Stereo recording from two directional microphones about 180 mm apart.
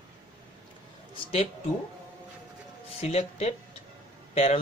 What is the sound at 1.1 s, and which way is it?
Speech, 35° left (ahead or behind).